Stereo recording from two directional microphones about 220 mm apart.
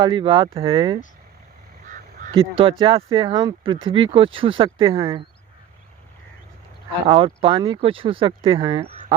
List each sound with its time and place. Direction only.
0.0 s speech: 20° right (ahead or behind)
2.3 s speech: 25° right (ahead or behind)
7.1 s speech: 25° right (ahead or behind)